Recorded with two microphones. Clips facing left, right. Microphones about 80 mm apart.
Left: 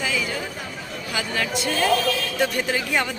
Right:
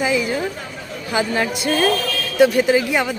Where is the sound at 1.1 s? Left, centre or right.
Right.